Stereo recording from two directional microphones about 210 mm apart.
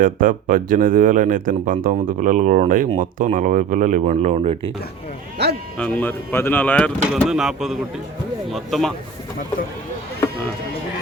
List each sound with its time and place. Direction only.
0.0 s speech: 40° right (ahead or behind)
5.4 s speech: 50° right (ahead or behind)
5.7 s speech: 5° left (ahead or behind)